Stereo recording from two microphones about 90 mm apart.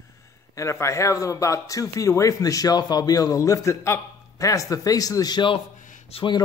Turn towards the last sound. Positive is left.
turn(degrees=60)  # may be behind; listen again after turning